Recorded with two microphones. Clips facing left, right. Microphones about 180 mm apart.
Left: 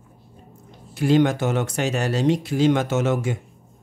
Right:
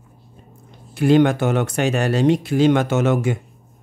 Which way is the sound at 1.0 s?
60° right (ahead or behind).